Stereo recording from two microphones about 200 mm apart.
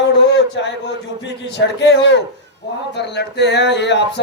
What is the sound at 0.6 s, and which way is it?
Speech, 65° left (ahead or behind).